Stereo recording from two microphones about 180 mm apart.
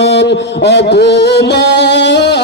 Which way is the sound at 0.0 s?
70° left (ahead or behind).